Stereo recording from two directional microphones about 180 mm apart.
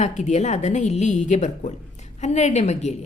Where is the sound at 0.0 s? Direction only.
40° left (ahead or behind).